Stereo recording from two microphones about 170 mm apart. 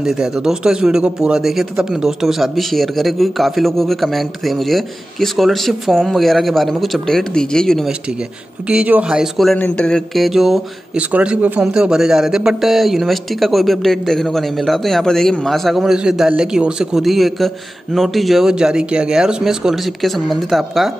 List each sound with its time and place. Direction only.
0.0 s speech: 5° right (ahead or behind)